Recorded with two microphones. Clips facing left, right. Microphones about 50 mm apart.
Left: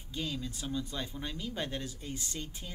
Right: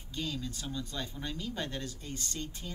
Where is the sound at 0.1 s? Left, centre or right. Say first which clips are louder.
Even; centre.